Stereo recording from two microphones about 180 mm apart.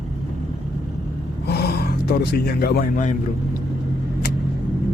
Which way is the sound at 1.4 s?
65° left (ahead or behind).